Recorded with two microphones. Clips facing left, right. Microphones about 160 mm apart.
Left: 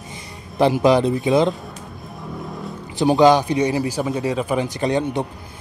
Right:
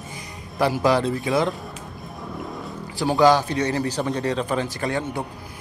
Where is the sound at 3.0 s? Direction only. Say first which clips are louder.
Left 3 dB; 20° left (ahead or behind).